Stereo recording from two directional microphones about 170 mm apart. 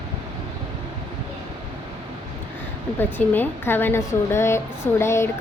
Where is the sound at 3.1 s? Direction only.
10° left (ahead or behind).